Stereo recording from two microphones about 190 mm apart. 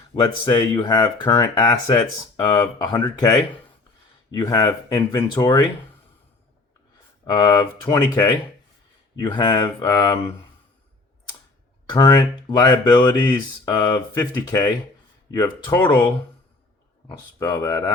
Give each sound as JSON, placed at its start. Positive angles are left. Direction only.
{"t": 0.2, "sound": "speech", "side_deg": 25}
{"t": 4.4, "sound": "speech", "side_deg": 20}
{"t": 7.3, "sound": "speech", "side_deg": 20}
{"t": 9.2, "sound": "speech", "side_deg": 25}
{"t": 11.9, "sound": "speech", "side_deg": 20}
{"t": 17.4, "sound": "speech", "side_deg": 20}